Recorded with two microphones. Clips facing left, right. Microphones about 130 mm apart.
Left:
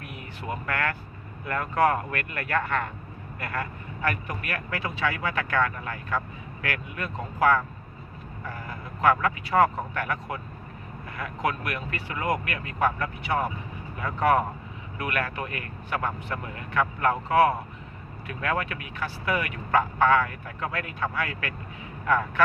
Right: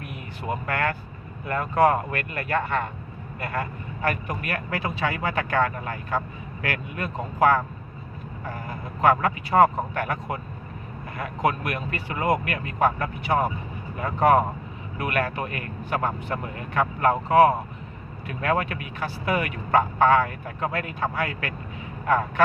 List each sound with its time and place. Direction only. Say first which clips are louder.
0.7 s fowl: right 3 dB; 35° right (ahead or behind)
1.5 s speech: right 3 dB; 25° right (ahead or behind)
4.4 s fowl: right 3 dB; 35° right (ahead or behind)
9.0 s fowl: right 2 dB; 35° right (ahead or behind)
22.0 s speech: right 2 dB; 35° right (ahead or behind)